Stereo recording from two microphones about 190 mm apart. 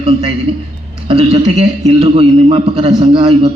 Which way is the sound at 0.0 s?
30° right (ahead or behind).